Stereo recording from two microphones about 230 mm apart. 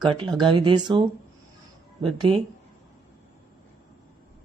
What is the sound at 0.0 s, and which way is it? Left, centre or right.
Speech, right.